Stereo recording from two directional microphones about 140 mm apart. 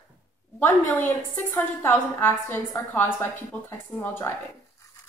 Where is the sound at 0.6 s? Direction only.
15° left (ahead or behind).